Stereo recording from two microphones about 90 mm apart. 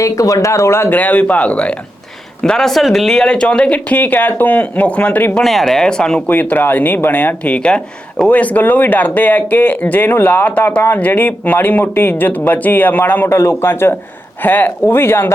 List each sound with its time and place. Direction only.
0.0 s speech: 35° left (ahead or behind); by 5.4 s 15° left (ahead or behind)
5.4 s speech: centre (ahead or behind)
6.2 s speech: 20° left (ahead or behind)